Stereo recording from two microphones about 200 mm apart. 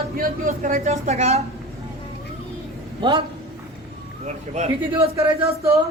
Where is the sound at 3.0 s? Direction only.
25° right (ahead or behind).